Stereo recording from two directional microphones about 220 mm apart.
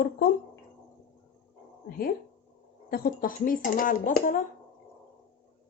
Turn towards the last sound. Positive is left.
turn(degrees=40)  # may be behind; listen again after turning